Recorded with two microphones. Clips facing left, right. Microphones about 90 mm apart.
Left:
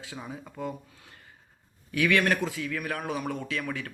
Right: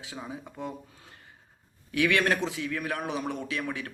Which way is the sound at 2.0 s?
25° right (ahead or behind).